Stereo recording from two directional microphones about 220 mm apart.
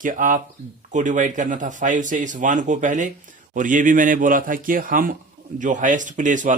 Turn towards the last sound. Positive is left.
turn(degrees=-35)  # may be behind; listen again after turning